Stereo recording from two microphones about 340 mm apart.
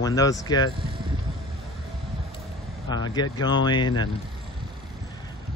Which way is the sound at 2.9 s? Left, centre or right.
Centre.